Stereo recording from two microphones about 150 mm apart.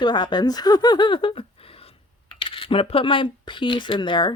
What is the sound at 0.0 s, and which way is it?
Speech, 30° left (ahead or behind).